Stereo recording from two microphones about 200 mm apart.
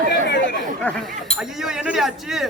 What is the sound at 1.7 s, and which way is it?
Speech, 5° right (ahead or behind).